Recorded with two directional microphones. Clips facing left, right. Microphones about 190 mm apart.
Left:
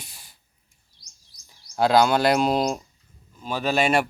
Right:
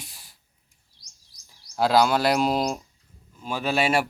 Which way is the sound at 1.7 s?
Centre (ahead or behind).